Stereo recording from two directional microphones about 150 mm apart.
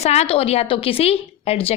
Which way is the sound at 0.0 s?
45° left (ahead or behind).